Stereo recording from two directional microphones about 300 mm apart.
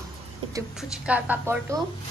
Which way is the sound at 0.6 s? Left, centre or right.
Centre.